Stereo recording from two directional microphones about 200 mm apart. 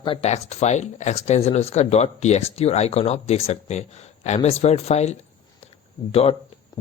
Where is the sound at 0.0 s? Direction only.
30° left (ahead or behind).